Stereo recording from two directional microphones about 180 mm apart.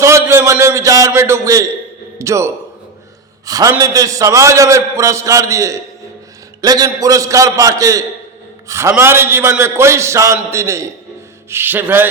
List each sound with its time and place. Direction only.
0.0 s a man's voice: 15° right (ahead or behind)